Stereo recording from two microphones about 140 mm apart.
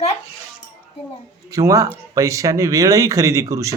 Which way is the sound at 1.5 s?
25° right (ahead or behind).